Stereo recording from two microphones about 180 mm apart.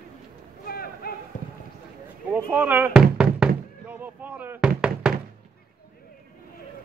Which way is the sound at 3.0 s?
5° right (ahead or behind).